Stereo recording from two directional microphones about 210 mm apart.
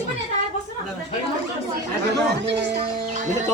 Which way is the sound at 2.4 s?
55° right (ahead or behind).